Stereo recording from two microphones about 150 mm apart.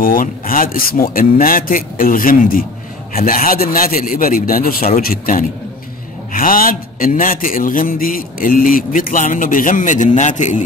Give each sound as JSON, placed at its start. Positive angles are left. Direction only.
{"t": 0.0, "sound": "a man's voice", "side_deg": 70}